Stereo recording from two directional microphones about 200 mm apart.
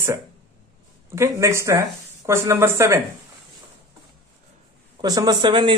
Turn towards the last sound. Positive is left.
turn(degrees=-25)  # may be behind; listen again after turning